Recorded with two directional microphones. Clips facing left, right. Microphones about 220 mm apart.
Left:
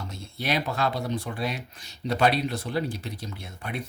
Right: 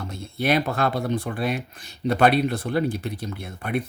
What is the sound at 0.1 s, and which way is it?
Speech, 55° right (ahead or behind).